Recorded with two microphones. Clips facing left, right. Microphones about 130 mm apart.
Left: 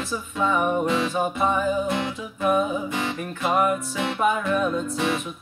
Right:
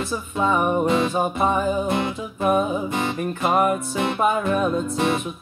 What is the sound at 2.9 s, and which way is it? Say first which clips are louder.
Music: right 4 dB; 50° right (ahead or behind).